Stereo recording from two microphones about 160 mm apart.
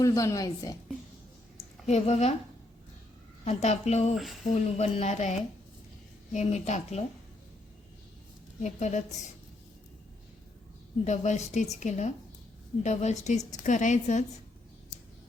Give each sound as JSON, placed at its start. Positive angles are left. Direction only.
{"t": 0.0, "sound": "a woman's voice", "side_deg": 20}
{"t": 1.9, "sound": "a woman's voice", "side_deg": 40}
{"t": 3.4, "sound": "a woman's voice", "side_deg": 45}
{"t": 6.3, "sound": "a woman's voice", "side_deg": 45}
{"t": 8.6, "sound": "a woman's voice", "side_deg": 50}
{"t": 11.0, "sound": "a woman's voice", "side_deg": 45}